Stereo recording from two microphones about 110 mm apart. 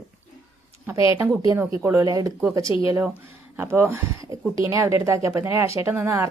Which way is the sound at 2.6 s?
50° left (ahead or behind).